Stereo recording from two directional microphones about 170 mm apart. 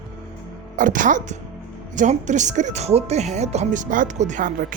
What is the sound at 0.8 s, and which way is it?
Speech, 50° right (ahead or behind).